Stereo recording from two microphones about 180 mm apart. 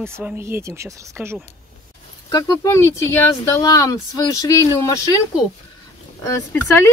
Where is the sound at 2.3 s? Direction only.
20° left (ahead or behind).